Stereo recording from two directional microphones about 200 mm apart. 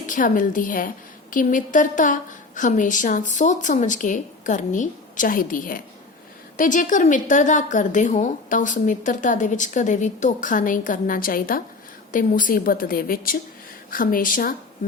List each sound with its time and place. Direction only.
0.0 s a woman's voice: 40° left (ahead or behind)